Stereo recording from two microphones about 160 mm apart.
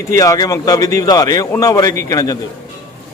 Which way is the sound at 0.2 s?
20° left (ahead or behind).